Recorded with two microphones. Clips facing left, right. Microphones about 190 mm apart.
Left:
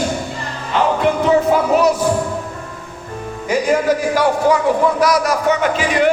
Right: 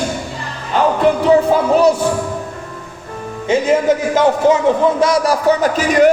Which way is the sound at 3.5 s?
25° right (ahead or behind).